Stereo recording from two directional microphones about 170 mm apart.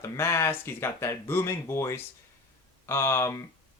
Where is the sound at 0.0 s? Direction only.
15° left (ahead or behind).